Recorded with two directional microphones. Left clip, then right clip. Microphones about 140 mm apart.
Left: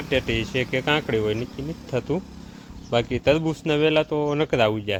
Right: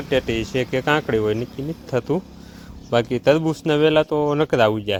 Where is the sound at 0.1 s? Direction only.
35° right (ahead or behind).